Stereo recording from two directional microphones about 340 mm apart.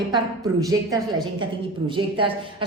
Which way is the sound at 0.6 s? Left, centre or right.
Centre.